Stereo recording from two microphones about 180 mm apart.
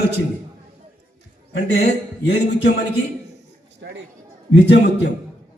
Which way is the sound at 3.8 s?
80° right.